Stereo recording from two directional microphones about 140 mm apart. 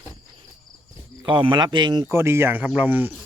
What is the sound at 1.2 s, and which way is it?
Speech, 35° right (ahead or behind).